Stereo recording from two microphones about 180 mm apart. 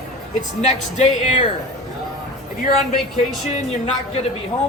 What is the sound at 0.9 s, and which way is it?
Speech, 40° left (ahead or behind).